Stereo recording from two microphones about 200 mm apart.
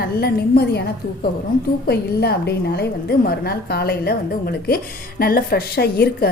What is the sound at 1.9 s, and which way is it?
A woman's voice, 55° left (ahead or behind).